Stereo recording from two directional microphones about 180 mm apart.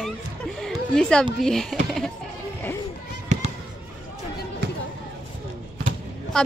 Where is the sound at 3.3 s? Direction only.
40° right (ahead or behind).